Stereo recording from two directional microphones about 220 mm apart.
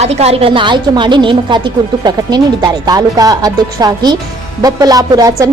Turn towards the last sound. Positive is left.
turn(degrees=-15)  # may be behind; listen again after turning